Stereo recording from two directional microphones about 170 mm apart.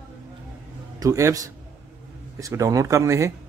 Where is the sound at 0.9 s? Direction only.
20° right (ahead or behind).